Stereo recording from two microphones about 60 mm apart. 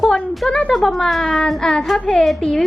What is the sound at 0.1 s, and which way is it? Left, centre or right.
A woman's voice, centre.